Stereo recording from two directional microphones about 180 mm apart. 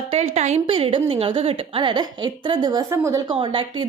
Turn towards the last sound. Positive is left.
turn(degrees=-30)  # may be behind; listen again after turning